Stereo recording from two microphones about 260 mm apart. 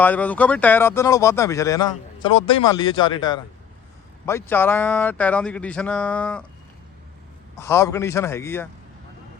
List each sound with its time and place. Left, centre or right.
0.0 s speech: centre
7.5 s speech: centre